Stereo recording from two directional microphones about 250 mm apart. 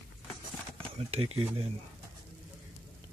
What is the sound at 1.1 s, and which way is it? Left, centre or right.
Speech, right.